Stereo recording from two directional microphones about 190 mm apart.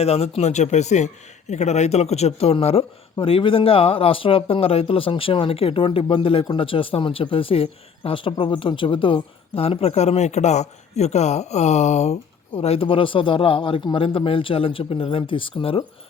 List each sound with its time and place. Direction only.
0.0 s a man's voice: 30° left (ahead or behind)